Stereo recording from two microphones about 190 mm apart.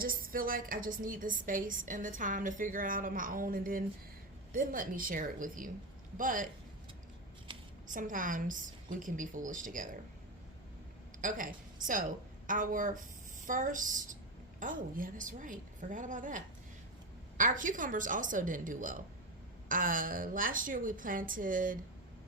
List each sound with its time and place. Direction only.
0.0 s a woman's voice: 50° right (ahead or behind)
7.9 s a woman's voice: 45° right (ahead or behind)
11.2 s a woman's voice: 45° right (ahead or behind)